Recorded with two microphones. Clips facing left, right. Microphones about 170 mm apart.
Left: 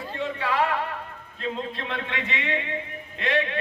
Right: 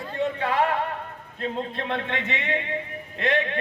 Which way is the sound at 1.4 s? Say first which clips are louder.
Right 2 dB; 50° right (ahead or behind).